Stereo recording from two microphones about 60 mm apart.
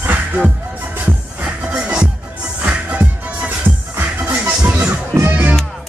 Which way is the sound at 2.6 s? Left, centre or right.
Right.